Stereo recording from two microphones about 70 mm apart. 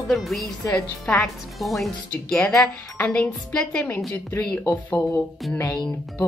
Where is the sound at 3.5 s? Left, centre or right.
Centre.